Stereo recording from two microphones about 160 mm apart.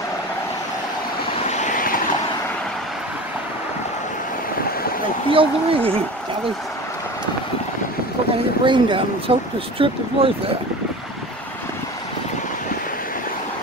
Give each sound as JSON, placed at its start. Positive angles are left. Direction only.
{"t": 1.5, "sound": "vehicle", "side_deg": 50}
{"t": 5.3, "sound": "speech", "side_deg": -35}
{"t": 8.6, "sound": "speech", "side_deg": -30}